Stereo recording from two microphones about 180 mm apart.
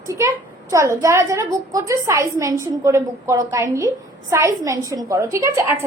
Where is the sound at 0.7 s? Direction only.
15° right (ahead or behind).